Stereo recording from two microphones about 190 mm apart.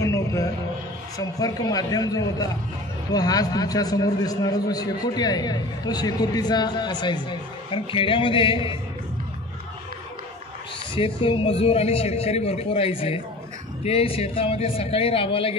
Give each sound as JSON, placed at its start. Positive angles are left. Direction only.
{"t": 0.0, "sound": "a sound", "side_deg": 15}
{"t": 1.1, "sound": "a man's voice", "side_deg": 20}
{"t": 11.0, "sound": "speech", "side_deg": 30}